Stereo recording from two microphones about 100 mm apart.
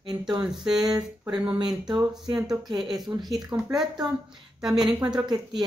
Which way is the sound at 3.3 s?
5° right (ahead or behind).